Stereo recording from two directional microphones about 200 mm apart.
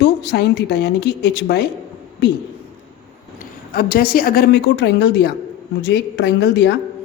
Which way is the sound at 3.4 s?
50° left (ahead or behind).